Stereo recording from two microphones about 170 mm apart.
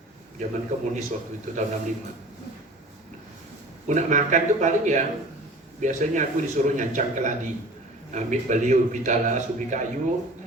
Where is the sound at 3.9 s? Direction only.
45° right (ahead or behind).